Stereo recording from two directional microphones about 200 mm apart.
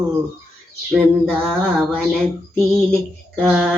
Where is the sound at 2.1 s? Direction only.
Centre (ahead or behind).